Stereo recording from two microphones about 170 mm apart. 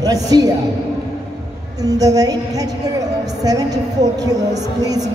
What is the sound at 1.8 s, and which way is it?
Speech, 20° right (ahead or behind).